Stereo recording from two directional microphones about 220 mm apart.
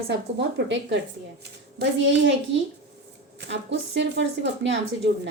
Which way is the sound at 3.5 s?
55° right (ahead or behind).